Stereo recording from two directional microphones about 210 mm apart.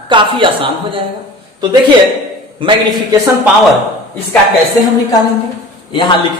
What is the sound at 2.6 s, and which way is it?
Speech, 25° right (ahead or behind).